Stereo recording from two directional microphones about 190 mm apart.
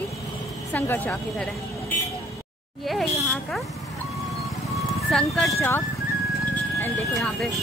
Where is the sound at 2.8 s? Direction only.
Centre (ahead or behind).